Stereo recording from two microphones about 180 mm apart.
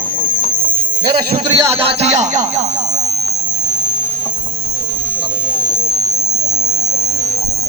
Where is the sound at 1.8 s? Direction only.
35° right (ahead or behind).